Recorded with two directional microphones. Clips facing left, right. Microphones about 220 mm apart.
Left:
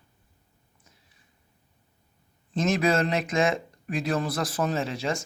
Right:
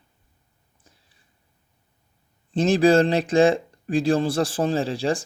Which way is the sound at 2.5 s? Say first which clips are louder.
Right 7 dB; 30° right (ahead or behind).